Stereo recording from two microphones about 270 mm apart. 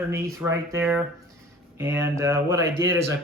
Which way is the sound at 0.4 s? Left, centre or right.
Centre.